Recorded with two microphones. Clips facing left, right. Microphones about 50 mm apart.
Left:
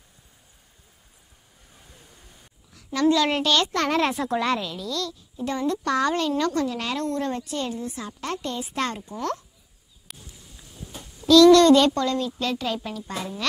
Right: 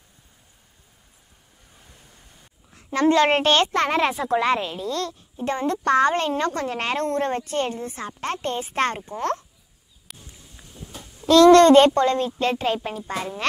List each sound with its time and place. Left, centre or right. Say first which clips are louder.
1.8 s vehicle: left 1 dB; centre
2.7 s a woman's voice: right 2 dB; right
3.8 s a woman's voice: right 1 dB; right
10.7 s a sound: even; centre
11.2 s a woman's voice: right 1 dB; right